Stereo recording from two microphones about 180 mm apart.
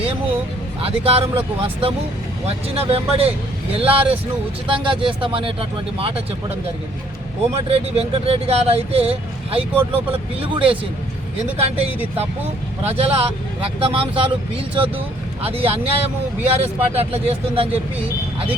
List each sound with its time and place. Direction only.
0.8 s speech: 30° right (ahead or behind)
7.7 s speech: 35° right (ahead or behind)
15.4 s speech: 30° right (ahead or behind)